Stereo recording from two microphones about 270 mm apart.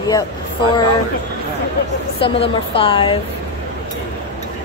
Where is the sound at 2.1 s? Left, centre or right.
Centre.